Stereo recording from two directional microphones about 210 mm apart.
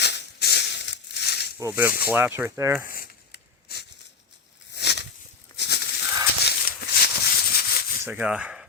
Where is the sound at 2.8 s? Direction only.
45° left (ahead or behind).